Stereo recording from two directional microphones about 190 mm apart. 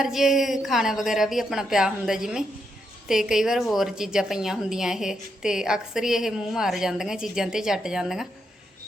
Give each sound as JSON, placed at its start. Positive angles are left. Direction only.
{"t": 0.0, "sound": "a woman's voice", "side_deg": 0}